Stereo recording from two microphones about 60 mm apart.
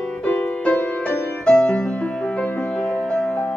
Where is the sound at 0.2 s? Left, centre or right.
Left.